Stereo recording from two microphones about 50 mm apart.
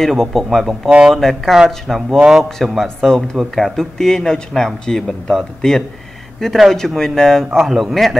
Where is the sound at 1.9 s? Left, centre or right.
Centre.